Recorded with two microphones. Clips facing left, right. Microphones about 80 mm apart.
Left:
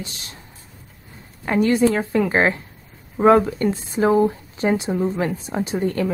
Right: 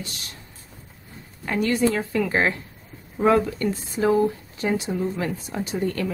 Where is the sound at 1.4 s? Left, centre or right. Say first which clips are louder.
Left 5 dB; left.